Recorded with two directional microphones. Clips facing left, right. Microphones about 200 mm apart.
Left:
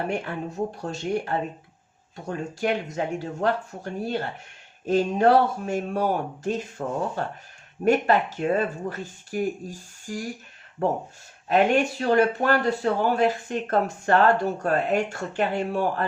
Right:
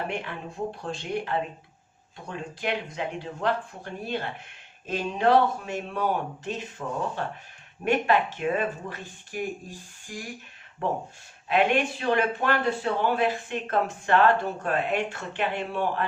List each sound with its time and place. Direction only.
0.1 s speech: 40° left (ahead or behind)
11.4 s speech: 40° left (ahead or behind)